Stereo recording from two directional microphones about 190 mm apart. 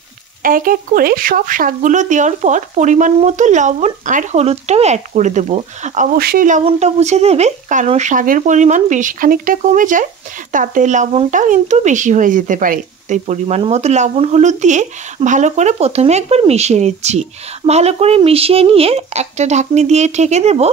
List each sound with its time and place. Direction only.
0.4 s speech: 45° right (ahead or behind)
6.1 s speech: 50° right (ahead or behind)
6.6 s speech: 35° right (ahead or behind)